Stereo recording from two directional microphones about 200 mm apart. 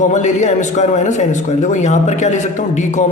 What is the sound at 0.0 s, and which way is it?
A man's voice, 35° left (ahead or behind).